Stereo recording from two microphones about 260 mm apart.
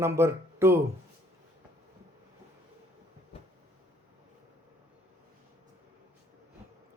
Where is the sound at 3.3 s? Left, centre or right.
Left.